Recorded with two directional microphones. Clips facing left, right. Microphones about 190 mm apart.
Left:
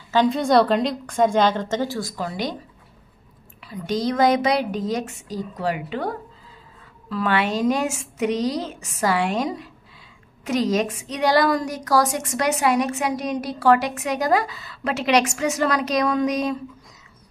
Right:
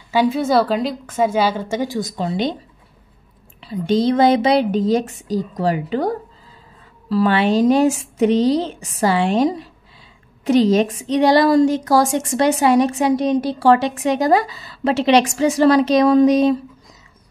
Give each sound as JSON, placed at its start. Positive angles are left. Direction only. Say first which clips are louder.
{"t": 0.1, "sound": "a woman's voice", "louder": "right 1 dB", "side_deg": -5}
{"t": 3.6, "sound": "a woman's voice", "louder": "right 7 dB", "side_deg": -25}